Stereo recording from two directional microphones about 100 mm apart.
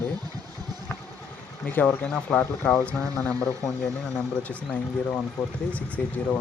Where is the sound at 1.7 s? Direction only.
20° left (ahead or behind).